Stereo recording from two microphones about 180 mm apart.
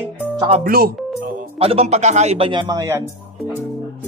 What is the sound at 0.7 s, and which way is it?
Speech, 55° right (ahead or behind).